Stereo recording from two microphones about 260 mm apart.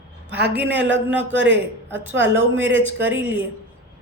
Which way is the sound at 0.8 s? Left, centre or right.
Right.